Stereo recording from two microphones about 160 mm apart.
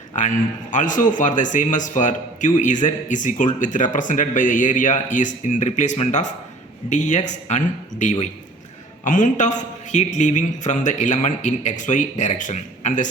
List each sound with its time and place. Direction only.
0.2 s speech: 50° left (ahead or behind)